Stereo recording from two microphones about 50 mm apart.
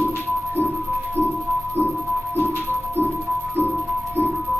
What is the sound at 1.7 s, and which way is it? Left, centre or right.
Music, left.